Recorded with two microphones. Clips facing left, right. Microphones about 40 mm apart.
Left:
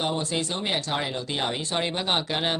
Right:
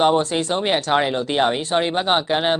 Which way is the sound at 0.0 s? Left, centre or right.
Right.